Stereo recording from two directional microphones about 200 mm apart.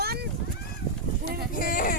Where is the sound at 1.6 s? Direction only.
45° left (ahead or behind).